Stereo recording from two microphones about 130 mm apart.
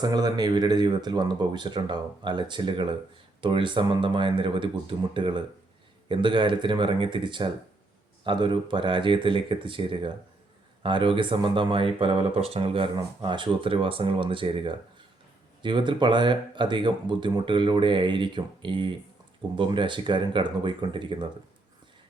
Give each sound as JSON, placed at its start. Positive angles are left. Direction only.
{"t": 0.0, "sound": "speech", "side_deg": -30}